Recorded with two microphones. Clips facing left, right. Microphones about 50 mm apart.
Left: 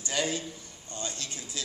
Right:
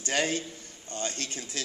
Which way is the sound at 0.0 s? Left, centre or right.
Right.